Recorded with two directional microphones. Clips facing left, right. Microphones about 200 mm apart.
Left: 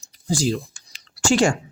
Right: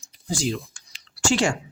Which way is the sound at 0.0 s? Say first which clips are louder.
Left 4 dB; 35° left (ahead or behind).